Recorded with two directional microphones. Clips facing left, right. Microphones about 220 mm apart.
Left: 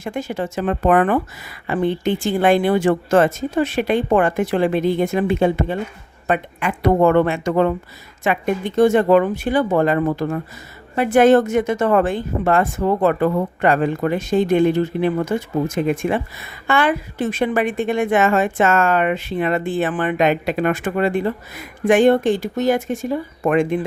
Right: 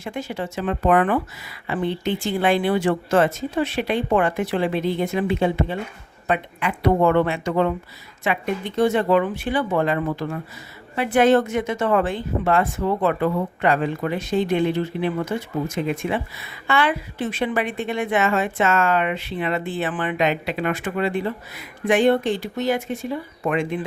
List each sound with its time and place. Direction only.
0.0 s a woman's voice: 45° left (ahead or behind)